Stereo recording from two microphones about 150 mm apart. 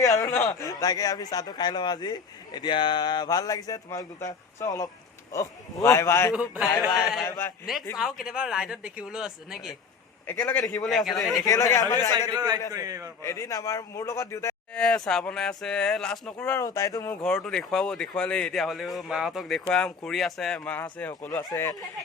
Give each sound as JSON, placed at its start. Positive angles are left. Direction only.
{"t": 0.0, "sound": "a man's voice", "side_deg": 25}
{"t": 6.3, "sound": "speech", "side_deg": -5}
{"t": 6.7, "sound": "a man's voice", "side_deg": 25}
{"t": 7.9, "sound": "speech", "side_deg": -5}
{"t": 10.3, "sound": "a man's voice", "side_deg": 15}
{"t": 10.8, "sound": "speech", "side_deg": 0}
{"t": 11.3, "sound": "a man's voice", "side_deg": 25}
{"t": 12.3, "sound": "a man's voice", "side_deg": -25}
{"t": 13.2, "sound": "a man's voice", "side_deg": 20}
{"t": 14.7, "sound": "speech", "side_deg": 5}
{"t": 16.6, "sound": "a man's voice", "side_deg": 20}
{"t": 17.2, "sound": "a man's voice", "side_deg": 5}